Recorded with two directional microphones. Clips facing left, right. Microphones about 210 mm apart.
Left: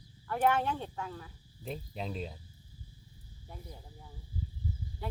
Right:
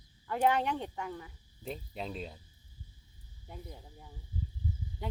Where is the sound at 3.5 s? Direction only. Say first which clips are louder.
Right 2 dB; 15° right (ahead or behind).